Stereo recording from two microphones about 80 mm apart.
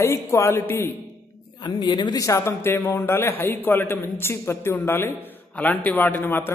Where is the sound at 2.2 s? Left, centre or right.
Left.